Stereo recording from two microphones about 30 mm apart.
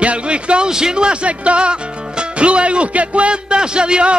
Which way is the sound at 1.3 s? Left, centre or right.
Right.